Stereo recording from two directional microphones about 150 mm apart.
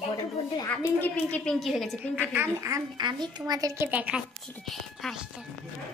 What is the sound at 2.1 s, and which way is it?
Speech, 10° right (ahead or behind).